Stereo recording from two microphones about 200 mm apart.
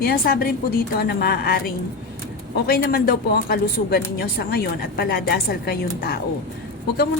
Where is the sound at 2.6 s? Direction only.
50° left (ahead or behind).